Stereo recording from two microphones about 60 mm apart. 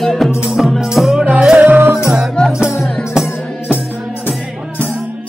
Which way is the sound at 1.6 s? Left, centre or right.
Right.